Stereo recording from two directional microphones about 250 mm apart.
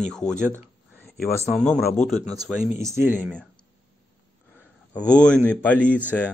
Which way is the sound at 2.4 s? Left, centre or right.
Centre.